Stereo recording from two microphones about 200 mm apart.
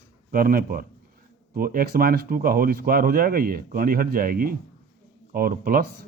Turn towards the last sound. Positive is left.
turn(degrees=-45)  # may be behind; listen again after turning